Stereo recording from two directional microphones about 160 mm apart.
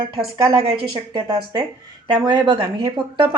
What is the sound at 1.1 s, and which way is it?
A woman's voice, 25° right (ahead or behind).